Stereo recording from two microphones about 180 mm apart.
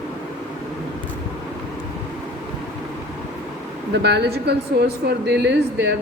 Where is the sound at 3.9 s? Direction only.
70° right (ahead or behind).